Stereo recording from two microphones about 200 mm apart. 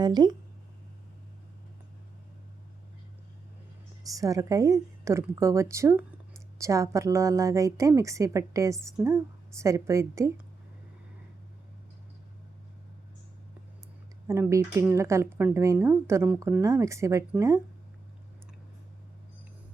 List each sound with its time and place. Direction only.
0.0 s speech: 20° right (ahead or behind)
4.0 s a woman's voice: 15° right (ahead or behind)
14.3 s a woman's voice: 15° right (ahead or behind)